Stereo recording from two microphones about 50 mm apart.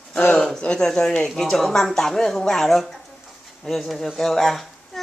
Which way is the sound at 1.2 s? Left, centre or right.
Centre.